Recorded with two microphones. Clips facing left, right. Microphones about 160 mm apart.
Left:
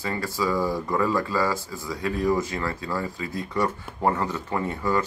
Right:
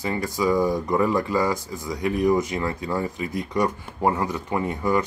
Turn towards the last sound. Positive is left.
turn(degrees=-15)  # may be behind; listen again after turning